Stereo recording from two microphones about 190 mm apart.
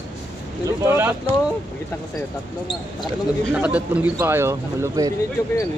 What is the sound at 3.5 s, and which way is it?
A man's voice, 5° right (ahead or behind).